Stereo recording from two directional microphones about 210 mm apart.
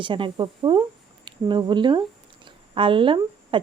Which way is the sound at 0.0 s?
25° right (ahead or behind).